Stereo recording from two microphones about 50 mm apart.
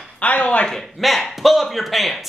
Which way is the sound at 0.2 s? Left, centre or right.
Left.